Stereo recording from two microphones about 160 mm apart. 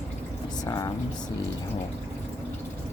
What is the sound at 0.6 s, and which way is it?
Speech, 25° left (ahead or behind).